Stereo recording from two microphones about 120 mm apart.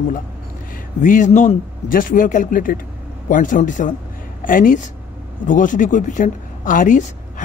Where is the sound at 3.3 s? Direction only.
90° left.